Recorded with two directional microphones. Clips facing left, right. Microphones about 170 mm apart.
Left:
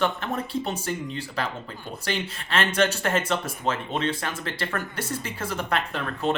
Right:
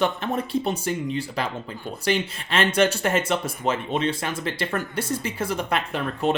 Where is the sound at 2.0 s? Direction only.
15° right (ahead or behind).